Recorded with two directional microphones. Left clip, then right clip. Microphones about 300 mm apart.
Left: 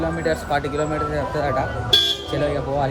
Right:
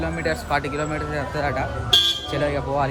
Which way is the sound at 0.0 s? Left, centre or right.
Centre.